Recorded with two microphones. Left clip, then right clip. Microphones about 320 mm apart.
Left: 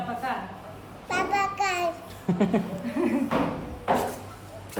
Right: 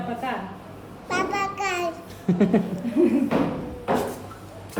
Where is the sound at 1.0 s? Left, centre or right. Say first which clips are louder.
Even; centre.